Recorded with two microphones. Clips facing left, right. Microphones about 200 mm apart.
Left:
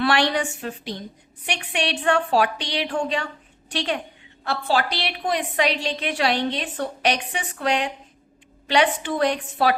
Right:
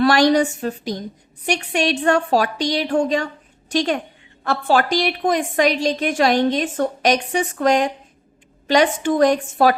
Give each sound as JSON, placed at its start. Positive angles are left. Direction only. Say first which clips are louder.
{"t": 0.0, "sound": "a woman's voice", "louder": "right 7 dB", "side_deg": -40}